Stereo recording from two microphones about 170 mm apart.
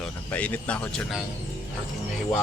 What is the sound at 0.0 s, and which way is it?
Speech, 10° left (ahead or behind).